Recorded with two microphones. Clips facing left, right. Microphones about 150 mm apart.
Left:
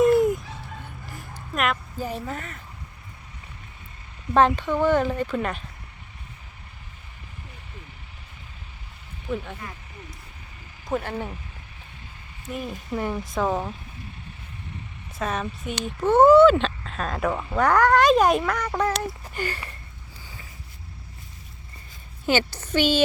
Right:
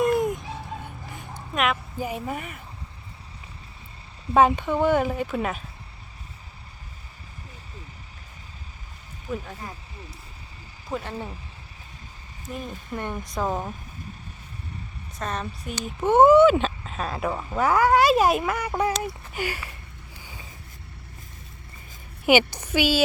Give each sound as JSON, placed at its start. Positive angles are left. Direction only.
{"t": 0.0, "sound": "fowl", "side_deg": 0}
{"t": 1.1, "sound": "a sound", "side_deg": 0}
{"t": 2.0, "sound": "speech", "side_deg": -10}
{"t": 4.4, "sound": "speech", "side_deg": -10}
{"t": 9.3, "sound": "speech", "side_deg": -5}
{"t": 9.6, "sound": "speech", "side_deg": -30}
{"t": 10.9, "sound": "speech", "side_deg": 5}
{"t": 12.5, "sound": "speech", "side_deg": 5}
{"t": 15.2, "sound": "speech", "side_deg": 5}
{"t": 16.0, "sound": "speech", "side_deg": -15}
{"t": 20.2, "sound": "a sound", "side_deg": -15}
{"t": 22.3, "sound": "speech", "side_deg": -15}